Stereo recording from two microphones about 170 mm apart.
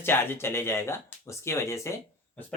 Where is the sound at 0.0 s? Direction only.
15° left (ahead or behind).